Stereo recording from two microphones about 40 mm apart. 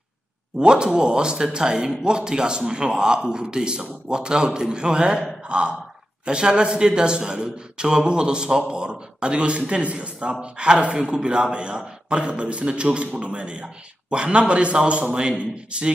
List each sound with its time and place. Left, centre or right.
0.6 s a man's voice: right